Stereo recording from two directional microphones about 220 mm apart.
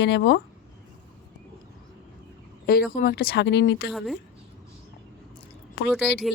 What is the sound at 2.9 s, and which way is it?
Speech, 40° left (ahead or behind).